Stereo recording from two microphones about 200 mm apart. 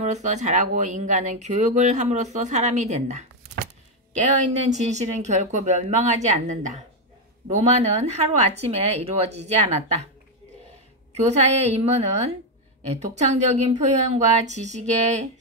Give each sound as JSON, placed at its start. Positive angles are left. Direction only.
{"t": 0.0, "sound": "speech", "side_deg": -35}
{"t": 4.6, "sound": "speech", "side_deg": -35}
{"t": 11.2, "sound": "speech", "side_deg": -35}